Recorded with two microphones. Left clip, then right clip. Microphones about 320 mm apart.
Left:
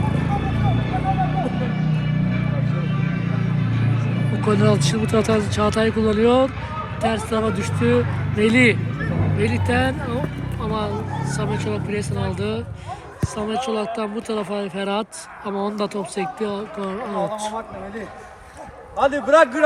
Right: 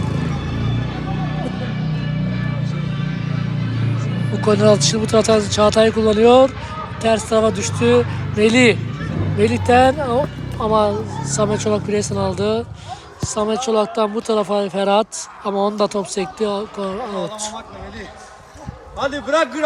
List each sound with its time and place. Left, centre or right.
4.4 s speech: centre
18.9 s a man's voice: left